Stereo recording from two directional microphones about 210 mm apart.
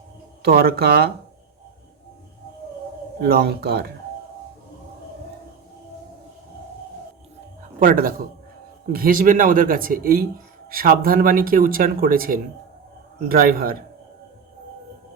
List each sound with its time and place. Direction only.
0.4 s speech: 45° right (ahead or behind)
3.2 s speech: 50° right (ahead or behind)
7.8 s speech: 40° right (ahead or behind)